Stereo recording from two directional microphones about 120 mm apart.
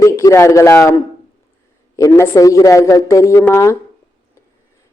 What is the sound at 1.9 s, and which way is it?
A woman's voice, 25° left (ahead or behind).